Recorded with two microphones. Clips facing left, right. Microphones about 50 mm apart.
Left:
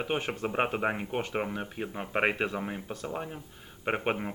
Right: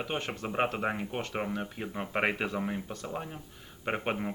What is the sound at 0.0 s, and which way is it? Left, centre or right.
Speech, centre.